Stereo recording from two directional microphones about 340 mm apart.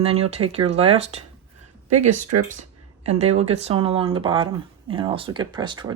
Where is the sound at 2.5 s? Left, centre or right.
Centre.